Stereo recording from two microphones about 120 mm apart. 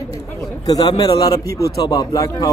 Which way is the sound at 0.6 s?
35° left (ahead or behind).